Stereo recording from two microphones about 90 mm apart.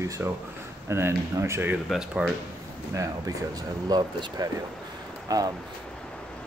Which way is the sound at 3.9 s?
50° right (ahead or behind).